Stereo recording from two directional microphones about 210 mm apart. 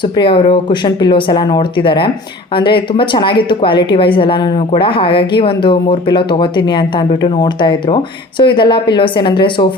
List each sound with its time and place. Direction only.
0.0 s a woman's voice: 25° left (ahead or behind)